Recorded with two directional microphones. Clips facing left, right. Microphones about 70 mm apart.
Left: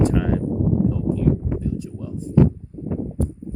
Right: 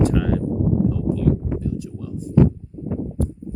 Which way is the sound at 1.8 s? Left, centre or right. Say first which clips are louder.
Even; left.